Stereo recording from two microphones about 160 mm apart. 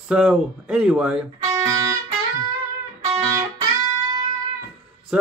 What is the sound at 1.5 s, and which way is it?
Music, 20° right (ahead or behind).